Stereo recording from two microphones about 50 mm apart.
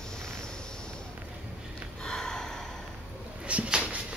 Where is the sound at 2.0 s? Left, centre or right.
Centre.